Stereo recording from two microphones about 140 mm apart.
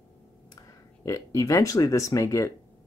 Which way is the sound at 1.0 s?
25° left (ahead or behind).